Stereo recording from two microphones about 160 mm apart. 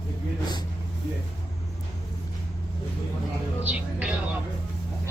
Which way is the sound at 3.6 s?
10° right (ahead or behind).